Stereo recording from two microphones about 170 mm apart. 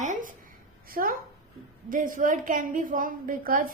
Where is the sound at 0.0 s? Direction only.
50° right (ahead or behind).